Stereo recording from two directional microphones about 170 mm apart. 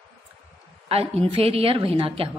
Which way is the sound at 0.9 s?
35° right (ahead or behind).